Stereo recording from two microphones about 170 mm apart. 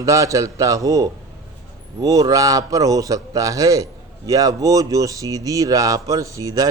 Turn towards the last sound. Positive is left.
turn(degrees=-20)  # may be behind; listen again after turning